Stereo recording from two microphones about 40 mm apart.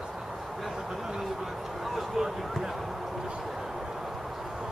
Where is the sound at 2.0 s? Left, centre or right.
Centre.